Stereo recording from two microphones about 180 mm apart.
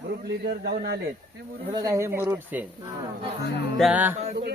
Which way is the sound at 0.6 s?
60° right (ahead or behind).